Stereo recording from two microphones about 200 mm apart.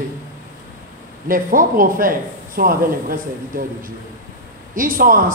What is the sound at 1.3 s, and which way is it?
A man's voice, 45° right (ahead or behind).